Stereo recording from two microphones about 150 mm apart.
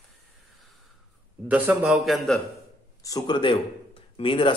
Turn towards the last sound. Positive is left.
turn(degrees=35)  # may be behind; listen again after turning